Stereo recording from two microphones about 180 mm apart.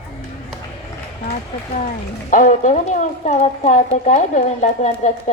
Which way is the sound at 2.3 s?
45° left (ahead or behind).